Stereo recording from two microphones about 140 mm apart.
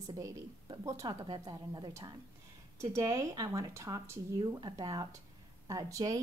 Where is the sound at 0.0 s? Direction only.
30° right (ahead or behind).